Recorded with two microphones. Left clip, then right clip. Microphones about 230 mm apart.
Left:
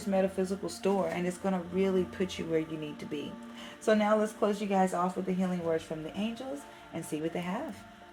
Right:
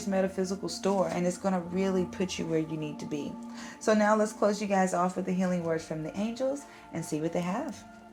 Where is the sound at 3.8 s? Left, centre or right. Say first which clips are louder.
Right 2 dB; right.